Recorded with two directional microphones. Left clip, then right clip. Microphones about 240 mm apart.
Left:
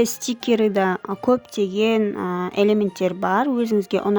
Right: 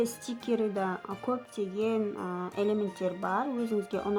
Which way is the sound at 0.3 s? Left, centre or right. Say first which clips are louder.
Left 12 dB; left.